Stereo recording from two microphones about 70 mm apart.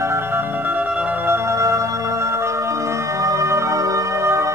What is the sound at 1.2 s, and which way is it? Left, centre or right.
Music, right.